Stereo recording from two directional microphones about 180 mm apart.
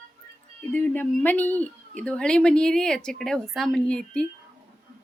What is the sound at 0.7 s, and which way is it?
Speech, 10° left (ahead or behind).